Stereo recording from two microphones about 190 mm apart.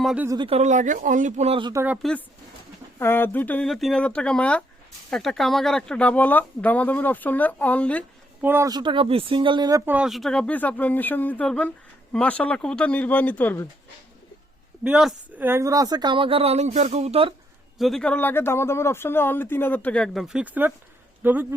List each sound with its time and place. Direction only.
0.0 s speech: 5° right (ahead or behind)
0.3 s speech: 25° right (ahead or behind)
1.8 s speech: 5° right (ahead or behind)
3.0 s speech: 10° left (ahead or behind)
8.4 s speech: 10° right (ahead or behind); by 13.7 s 10° left (ahead or behind)
14.8 s speech: 5° right (ahead or behind); by 17.3 s 30° right (ahead or behind)
17.7 s speech: centre (ahead or behind)